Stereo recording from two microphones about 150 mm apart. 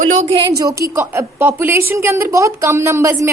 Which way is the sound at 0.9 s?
15° right (ahead or behind).